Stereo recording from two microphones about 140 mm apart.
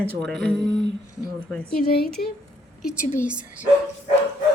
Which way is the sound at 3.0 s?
65° left (ahead or behind).